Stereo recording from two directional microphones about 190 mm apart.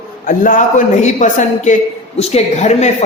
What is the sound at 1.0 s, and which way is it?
A man's voice, 40° left (ahead or behind).